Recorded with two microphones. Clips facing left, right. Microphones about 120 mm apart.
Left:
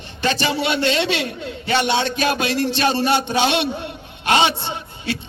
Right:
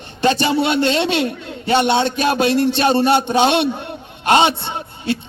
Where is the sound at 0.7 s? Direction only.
45° right (ahead or behind).